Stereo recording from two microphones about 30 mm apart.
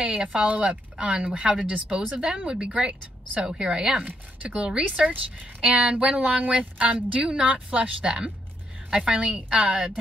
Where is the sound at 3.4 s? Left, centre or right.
Right.